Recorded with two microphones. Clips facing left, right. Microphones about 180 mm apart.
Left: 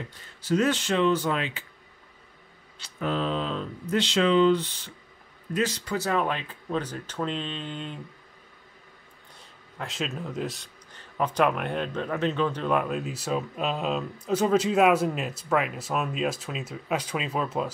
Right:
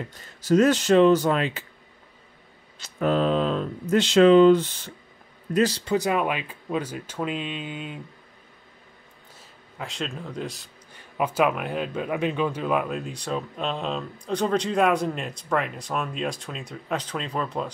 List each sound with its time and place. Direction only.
0.4 s speech: 40° right (ahead or behind)
2.8 s speech: 50° right (ahead or behind)
5.5 s speech: 35° right (ahead or behind)
5.9 s speech: 15° right (ahead or behind)
9.8 s speech: centre (ahead or behind)
11.0 s speech: 10° right (ahead or behind)